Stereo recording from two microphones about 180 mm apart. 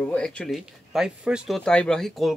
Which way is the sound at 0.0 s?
5° left (ahead or behind).